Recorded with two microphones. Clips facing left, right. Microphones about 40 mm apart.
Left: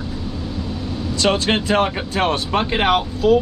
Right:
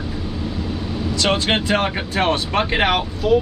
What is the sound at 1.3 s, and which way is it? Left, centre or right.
Speech, centre.